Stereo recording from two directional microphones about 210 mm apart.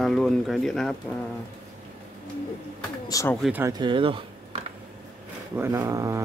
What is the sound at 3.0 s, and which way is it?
Speech, 15° left (ahead or behind).